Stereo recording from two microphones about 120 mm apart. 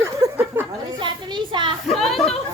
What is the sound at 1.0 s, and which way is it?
Speech, 40° right (ahead or behind).